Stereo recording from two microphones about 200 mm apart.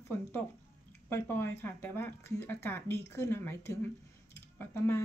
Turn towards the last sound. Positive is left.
turn(degrees=10)  # may be behind; listen again after turning